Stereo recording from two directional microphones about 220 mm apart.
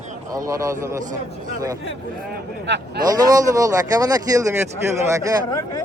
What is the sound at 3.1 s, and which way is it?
Speech, 15° right (ahead or behind).